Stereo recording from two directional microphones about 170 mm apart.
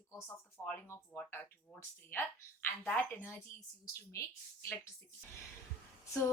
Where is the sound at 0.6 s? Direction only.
5° left (ahead or behind).